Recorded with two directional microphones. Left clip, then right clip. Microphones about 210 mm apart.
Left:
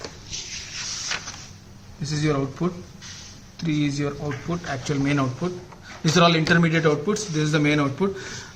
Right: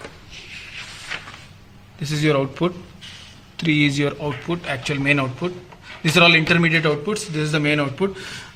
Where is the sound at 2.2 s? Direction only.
35° right (ahead or behind).